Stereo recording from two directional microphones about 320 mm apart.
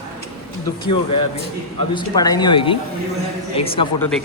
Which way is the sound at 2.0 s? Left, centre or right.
Centre.